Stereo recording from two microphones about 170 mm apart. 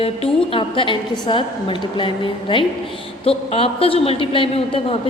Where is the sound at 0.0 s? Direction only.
35° left (ahead or behind).